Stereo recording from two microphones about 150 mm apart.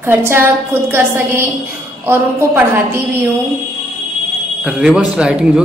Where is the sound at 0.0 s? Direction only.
15° right (ahead or behind).